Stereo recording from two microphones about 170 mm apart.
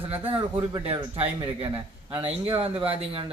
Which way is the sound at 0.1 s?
35° right (ahead or behind).